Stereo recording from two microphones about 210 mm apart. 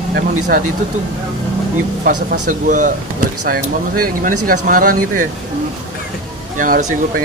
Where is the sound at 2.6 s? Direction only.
35° right (ahead or behind).